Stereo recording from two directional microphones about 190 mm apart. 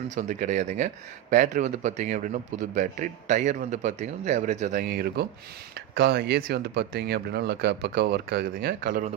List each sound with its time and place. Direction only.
0.1 s speech: 45° right (ahead or behind)